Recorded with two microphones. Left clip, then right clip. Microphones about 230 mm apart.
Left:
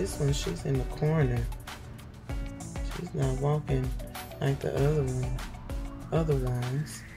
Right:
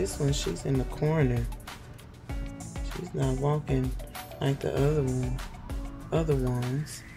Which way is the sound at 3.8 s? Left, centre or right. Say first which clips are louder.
Right 2 dB; centre.